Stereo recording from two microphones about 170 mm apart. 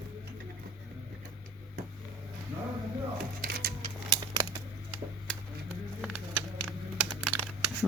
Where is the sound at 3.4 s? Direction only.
65° right (ahead or behind).